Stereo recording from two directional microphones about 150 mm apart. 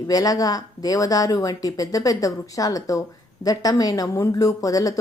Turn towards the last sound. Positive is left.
turn(degrees=25)  # may be behind; listen again after turning